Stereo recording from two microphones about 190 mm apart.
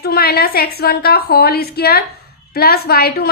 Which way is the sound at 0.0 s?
55° left (ahead or behind).